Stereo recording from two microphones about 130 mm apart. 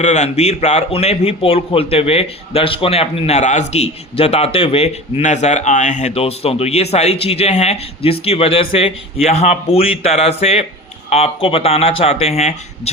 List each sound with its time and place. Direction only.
0.0 s a man's voice: 60° left (ahead or behind)